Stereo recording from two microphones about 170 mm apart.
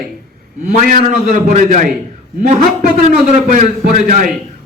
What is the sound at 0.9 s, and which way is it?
A man's voice, 55° right (ahead or behind).